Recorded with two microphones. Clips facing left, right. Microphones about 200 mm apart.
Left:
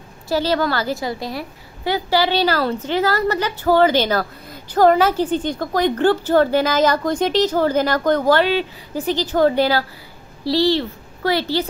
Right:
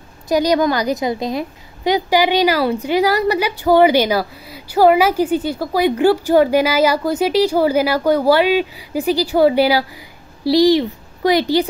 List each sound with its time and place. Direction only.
0.3 s a woman's voice: 15° right (ahead or behind)